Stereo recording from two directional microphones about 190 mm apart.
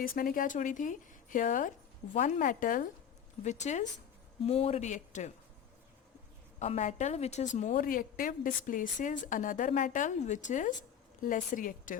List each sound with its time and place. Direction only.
0.2 s a woman's voice: 45° left (ahead or behind)
6.6 s a woman's voice: 35° left (ahead or behind)